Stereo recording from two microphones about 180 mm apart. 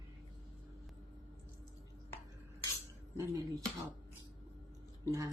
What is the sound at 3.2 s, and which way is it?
Speech, 20° right (ahead or behind).